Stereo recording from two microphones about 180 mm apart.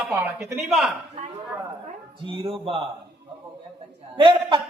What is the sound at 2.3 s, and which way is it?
Speech, 30° right (ahead or behind).